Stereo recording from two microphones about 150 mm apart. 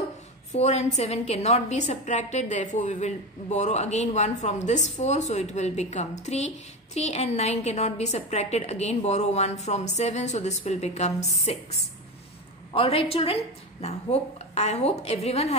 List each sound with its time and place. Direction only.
0.5 s a woman's voice: 50° left (ahead or behind)
12.7 s a woman's voice: 40° left (ahead or behind)